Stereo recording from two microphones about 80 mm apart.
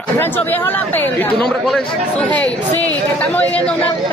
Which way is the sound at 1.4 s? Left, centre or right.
Centre.